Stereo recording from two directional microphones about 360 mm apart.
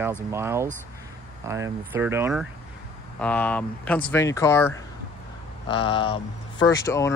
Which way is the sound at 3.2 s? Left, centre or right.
Centre.